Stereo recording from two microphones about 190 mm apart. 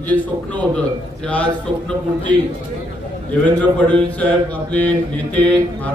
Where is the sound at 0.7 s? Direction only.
5° left (ahead or behind).